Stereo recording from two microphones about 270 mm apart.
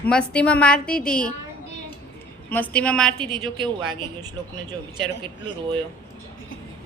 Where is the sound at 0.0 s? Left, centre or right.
Centre.